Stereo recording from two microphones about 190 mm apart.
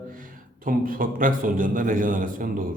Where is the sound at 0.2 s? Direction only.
45° right (ahead or behind).